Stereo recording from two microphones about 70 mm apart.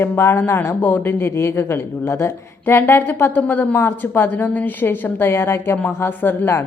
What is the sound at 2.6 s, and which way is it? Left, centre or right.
Speech, left.